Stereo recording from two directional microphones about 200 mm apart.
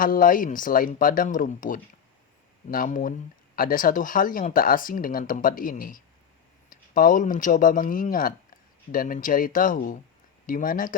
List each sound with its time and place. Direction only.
0.0 s speech: 45° left (ahead or behind)